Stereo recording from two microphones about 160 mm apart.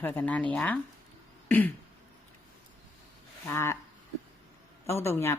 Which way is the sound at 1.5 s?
10° left (ahead or behind).